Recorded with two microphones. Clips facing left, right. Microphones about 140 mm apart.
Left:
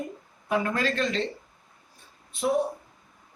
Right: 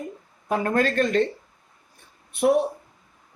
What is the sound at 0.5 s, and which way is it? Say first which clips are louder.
Speech: right 4 dB; 45° right (ahead or behind).